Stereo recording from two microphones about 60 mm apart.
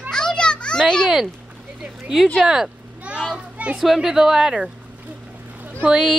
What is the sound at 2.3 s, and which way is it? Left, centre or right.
Speech, centre.